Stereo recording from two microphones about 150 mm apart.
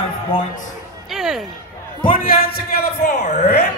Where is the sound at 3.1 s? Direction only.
50° left (ahead or behind).